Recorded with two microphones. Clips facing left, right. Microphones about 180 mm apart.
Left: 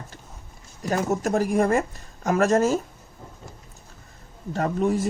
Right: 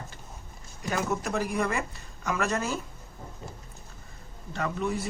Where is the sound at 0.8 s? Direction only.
40° left (ahead or behind).